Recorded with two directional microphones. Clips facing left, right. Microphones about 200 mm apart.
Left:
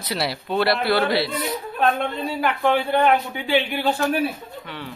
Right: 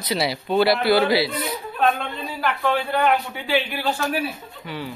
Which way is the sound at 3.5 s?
20° left (ahead or behind).